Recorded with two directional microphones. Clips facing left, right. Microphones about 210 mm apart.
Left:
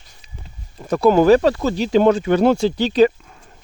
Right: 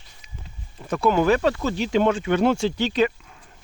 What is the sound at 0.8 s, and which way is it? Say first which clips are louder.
Speech: left 6 dB; 40° left (ahead or behind).